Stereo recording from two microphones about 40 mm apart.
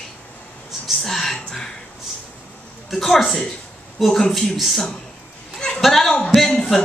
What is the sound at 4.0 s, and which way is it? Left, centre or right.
A man's voice, centre.